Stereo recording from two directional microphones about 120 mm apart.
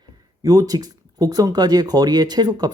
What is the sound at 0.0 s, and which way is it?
Speech, 35° right (ahead or behind).